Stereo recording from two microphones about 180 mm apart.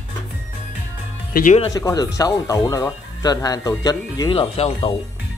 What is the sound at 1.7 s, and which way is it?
Speech, 20° left (ahead or behind).